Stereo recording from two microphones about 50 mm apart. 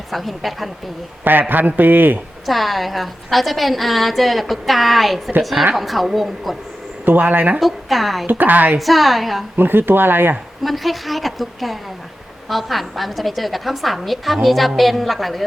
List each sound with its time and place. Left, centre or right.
0.1 s a woman's voice: centre
1.2 s a man's voice: right
2.5 s a woman's voice: centre
7.0 s a man's voice: right
7.6 s a woman's voice: centre
8.3 s a man's voice: right
8.8 s a woman's voice: centre
9.6 s speech: right
10.6 s a woman's voice: centre